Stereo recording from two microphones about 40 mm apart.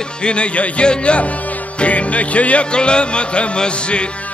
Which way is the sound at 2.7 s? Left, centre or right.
Left.